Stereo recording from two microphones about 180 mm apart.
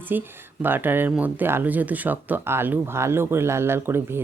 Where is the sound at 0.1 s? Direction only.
10° right (ahead or behind).